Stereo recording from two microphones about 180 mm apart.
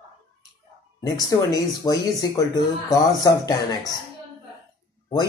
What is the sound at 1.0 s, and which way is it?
Speech, 20° left (ahead or behind).